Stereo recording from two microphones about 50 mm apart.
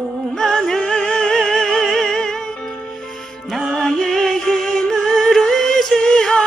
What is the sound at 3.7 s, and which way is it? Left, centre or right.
Music, centre.